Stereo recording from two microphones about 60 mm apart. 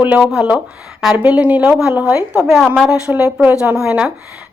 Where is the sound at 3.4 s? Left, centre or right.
Right.